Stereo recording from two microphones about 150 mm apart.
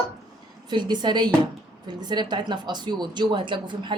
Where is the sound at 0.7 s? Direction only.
30° right (ahead or behind).